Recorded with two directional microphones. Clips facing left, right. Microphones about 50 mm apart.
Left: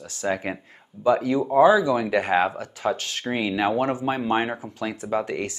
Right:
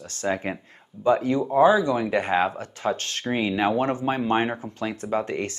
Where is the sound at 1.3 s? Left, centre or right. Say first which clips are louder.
Left 2 dB; centre.